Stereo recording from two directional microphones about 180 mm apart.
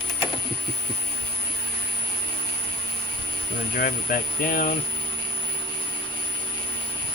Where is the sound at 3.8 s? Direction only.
50° left (ahead or behind).